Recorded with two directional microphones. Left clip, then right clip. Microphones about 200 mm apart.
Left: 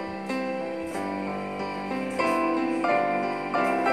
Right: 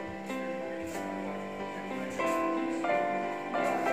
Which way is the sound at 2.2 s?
40° left (ahead or behind).